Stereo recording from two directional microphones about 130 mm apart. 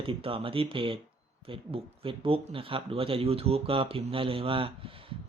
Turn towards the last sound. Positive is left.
turn(degrees=-45)  # may be behind; listen again after turning